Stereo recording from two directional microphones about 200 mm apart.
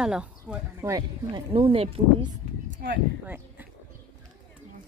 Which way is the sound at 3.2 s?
10° right (ahead or behind).